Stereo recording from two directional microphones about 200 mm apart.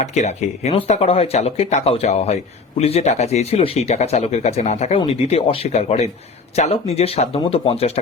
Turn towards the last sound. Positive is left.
turn(degrees=30)  # may be behind; listen again after turning